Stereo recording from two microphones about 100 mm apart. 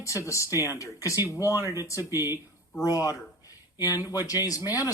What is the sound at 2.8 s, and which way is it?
Speech, 35° left (ahead or behind).